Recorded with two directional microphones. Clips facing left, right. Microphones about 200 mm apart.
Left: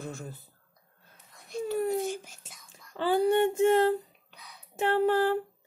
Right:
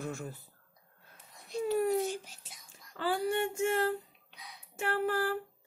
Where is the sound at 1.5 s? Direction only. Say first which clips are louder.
Even; 50° left (ahead or behind).